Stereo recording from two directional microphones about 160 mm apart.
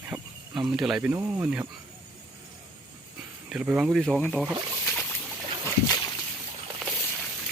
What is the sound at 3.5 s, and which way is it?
Speech, 5° right (ahead or behind).